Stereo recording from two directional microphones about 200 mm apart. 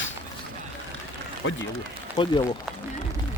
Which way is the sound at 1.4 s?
75° left (ahead or behind).